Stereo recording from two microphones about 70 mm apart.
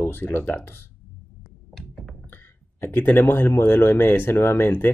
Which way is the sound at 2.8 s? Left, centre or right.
Left.